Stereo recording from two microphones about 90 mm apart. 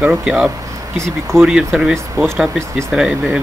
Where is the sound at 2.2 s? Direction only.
30° right (ahead or behind).